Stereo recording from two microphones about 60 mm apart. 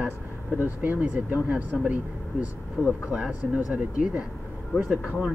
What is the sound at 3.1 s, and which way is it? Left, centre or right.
Speech, centre.